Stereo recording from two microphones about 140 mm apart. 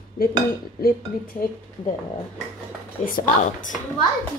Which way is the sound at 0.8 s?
90° left.